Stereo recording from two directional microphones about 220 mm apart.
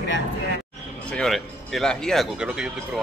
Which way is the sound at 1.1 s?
Centre (ahead or behind).